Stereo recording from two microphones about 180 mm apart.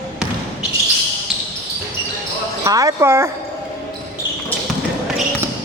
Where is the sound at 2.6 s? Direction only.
20° right (ahead or behind).